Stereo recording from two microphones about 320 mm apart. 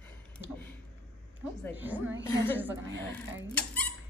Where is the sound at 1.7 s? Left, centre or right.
Centre.